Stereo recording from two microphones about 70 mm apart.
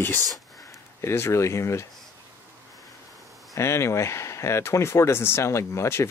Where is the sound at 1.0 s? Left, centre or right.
Left.